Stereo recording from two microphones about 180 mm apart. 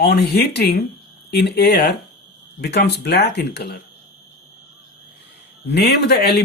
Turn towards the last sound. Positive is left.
turn(degrees=65)  # may be behind; listen again after turning